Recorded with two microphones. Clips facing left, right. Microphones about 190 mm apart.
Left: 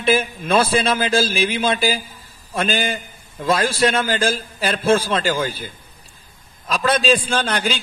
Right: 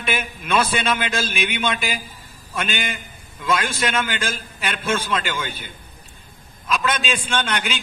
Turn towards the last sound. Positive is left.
turn(degrees=35)  # may be behind; listen again after turning